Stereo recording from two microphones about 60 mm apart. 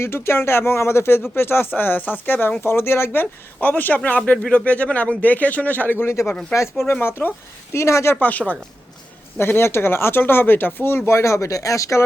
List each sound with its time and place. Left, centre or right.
0.0 s speech: left
6.5 s speech: left
7.0 s speech: left
7.7 s speech: left
8.1 s speech: left
9.4 s speech: left